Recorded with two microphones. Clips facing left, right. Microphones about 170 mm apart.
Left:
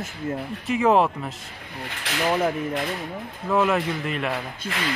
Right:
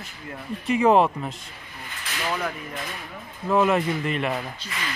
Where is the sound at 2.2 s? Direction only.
25° left (ahead or behind).